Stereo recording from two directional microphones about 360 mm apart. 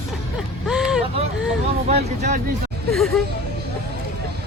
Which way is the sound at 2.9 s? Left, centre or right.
Centre.